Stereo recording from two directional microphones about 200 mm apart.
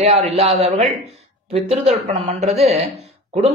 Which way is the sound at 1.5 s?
30° right (ahead or behind).